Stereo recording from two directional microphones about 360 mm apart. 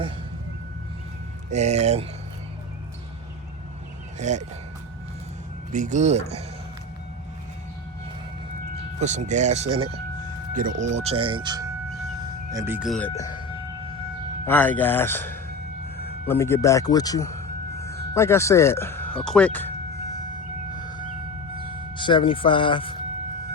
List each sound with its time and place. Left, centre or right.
1.5 s speech: centre
4.2 s speech: centre
5.7 s speech: right
9.0 s speech: centre
13.1 s speech: centre
14.4 s speech: centre
20.7 s a sound: centre
21.9 s speech: centre